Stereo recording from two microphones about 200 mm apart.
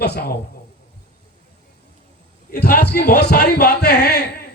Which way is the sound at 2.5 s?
50° left (ahead or behind).